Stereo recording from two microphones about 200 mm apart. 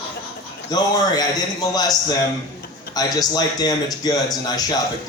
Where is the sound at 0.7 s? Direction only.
20° left (ahead or behind).